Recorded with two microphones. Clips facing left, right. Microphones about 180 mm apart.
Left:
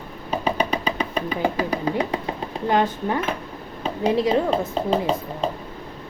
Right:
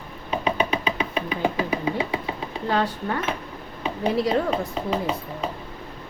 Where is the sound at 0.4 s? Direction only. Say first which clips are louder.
Left 1 dB; 5° right (ahead or behind).